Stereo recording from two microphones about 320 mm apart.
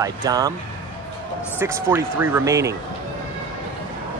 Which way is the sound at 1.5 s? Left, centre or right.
Centre.